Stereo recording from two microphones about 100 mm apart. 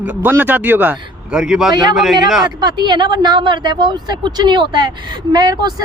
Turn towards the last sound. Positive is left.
turn(degrees=-40)  # may be behind; listen again after turning